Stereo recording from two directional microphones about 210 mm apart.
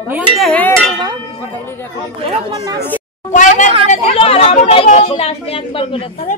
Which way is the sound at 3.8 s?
30° left (ahead or behind).